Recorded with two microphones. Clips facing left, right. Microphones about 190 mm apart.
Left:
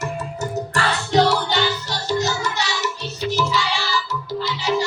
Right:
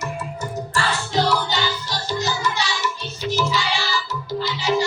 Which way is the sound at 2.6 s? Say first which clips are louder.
Left 1 dB; 70° left (ahead or behind).